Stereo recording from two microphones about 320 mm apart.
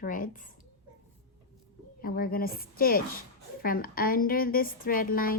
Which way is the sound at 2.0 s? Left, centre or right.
Left.